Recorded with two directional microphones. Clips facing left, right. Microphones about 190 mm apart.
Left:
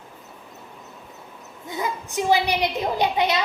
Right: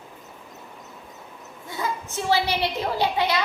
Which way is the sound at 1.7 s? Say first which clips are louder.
Left 1 dB; 15° left (ahead or behind).